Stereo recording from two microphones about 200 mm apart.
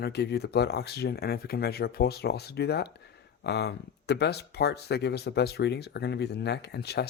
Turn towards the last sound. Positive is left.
turn(degrees=55)  # may be behind; listen again after turning